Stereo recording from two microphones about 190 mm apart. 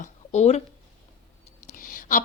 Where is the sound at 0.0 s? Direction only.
35° left (ahead or behind).